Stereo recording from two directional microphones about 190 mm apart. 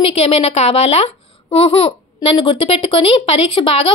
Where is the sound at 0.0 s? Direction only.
30° left (ahead or behind).